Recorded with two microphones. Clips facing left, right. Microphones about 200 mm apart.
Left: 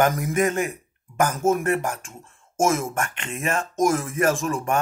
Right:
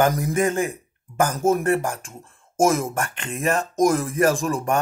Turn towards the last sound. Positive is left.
turn(degrees=-35)  # may be behind; listen again after turning